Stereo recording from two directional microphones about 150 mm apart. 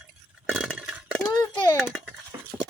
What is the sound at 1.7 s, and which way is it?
Speech, centre (ahead or behind).